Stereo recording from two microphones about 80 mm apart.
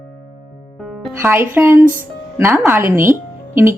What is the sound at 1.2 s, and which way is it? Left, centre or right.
Speech, right.